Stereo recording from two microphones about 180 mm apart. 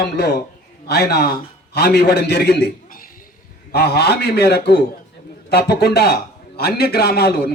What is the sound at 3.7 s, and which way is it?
A man's voice, 65° left (ahead or behind).